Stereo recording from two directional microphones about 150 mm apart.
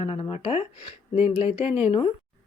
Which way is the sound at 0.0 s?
40° left (ahead or behind).